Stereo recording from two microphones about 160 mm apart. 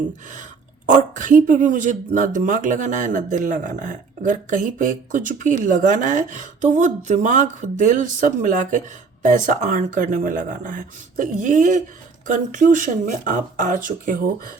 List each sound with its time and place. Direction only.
0.9 s speech: 50° right (ahead or behind)